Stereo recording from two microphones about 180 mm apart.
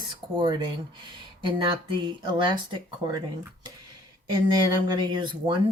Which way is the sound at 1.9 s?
25° right (ahead or behind).